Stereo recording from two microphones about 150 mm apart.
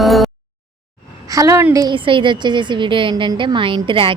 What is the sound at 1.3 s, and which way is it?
A woman's voice, 20° right (ahead or behind).